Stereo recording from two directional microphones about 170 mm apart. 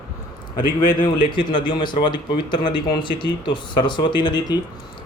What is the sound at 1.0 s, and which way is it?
Speech, 30° left (ahead or behind).